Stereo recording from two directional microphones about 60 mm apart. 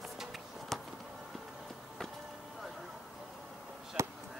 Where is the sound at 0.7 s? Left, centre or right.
Centre.